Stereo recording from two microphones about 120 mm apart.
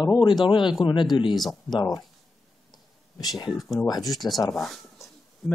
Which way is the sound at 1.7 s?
35° left (ahead or behind).